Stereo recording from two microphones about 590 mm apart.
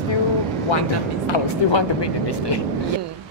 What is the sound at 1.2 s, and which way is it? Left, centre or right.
Speech, left.